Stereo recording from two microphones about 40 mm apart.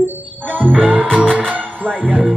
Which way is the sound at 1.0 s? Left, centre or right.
Left.